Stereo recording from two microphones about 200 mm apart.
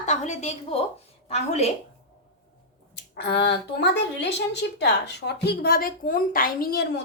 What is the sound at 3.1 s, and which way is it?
A woman's voice, 60° left (ahead or behind).